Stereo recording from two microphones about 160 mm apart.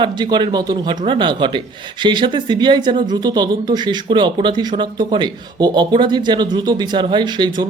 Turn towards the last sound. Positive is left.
turn(degrees=-30)  # may be behind; listen again after turning